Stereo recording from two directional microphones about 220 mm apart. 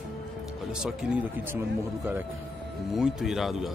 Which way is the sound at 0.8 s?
5° right (ahead or behind).